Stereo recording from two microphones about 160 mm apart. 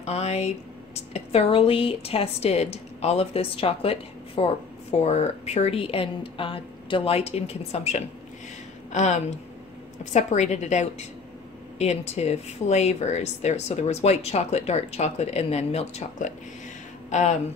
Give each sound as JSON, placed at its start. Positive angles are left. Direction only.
{"t": 0.0, "sound": "speech", "side_deg": 40}